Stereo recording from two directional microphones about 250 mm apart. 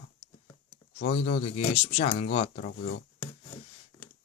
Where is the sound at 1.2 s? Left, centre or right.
Left.